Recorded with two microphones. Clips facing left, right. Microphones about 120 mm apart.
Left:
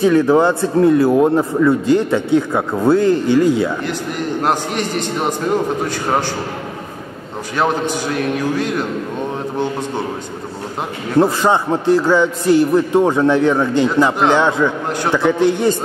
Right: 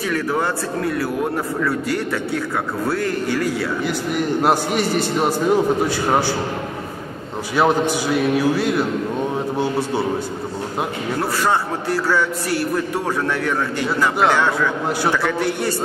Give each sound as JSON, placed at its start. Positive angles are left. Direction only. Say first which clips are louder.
{"t": 0.0, "sound": "a man's voice", "louder": "left 9 dB", "side_deg": 25}
{"t": 3.8, "sound": "a man's voice", "louder": "right 1 dB", "side_deg": -5}
{"t": 7.5, "sound": "a man's voice", "louder": "right 1 dB", "side_deg": -10}
{"t": 11.1, "sound": "a man's voice", "louder": "left 7 dB", "side_deg": 20}